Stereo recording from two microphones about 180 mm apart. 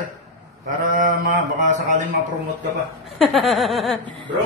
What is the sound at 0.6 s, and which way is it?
Sheep, 45° right (ahead or behind).